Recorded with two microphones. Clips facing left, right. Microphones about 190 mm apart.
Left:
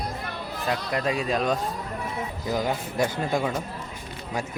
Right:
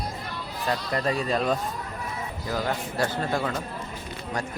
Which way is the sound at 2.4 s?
15° left (ahead or behind).